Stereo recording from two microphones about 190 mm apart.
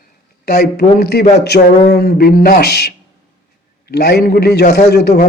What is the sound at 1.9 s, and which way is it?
A man's voice, 55° left (ahead or behind).